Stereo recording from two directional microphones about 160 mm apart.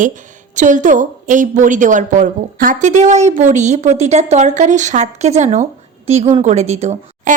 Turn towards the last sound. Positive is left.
turn(degrees=-45)  # may be behind; listen again after turning